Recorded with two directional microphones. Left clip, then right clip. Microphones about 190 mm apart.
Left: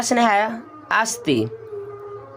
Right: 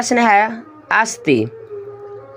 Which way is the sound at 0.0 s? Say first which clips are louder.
Right 5 dB; 15° right (ahead or behind).